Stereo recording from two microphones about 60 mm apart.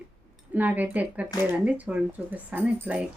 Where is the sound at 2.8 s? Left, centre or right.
Right.